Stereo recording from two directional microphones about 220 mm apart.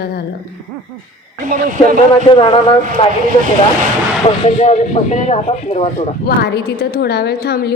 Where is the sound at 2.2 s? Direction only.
25° left (ahead or behind).